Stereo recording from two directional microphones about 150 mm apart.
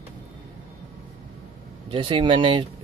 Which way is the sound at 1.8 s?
35° right (ahead or behind).